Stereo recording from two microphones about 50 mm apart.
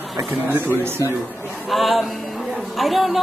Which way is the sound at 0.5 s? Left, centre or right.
Right.